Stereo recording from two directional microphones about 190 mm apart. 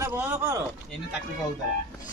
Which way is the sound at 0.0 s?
10° right (ahead or behind).